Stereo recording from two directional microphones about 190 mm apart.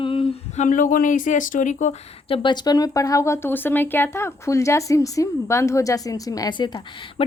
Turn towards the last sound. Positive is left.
turn(degrees=25)  # may be behind; listen again after turning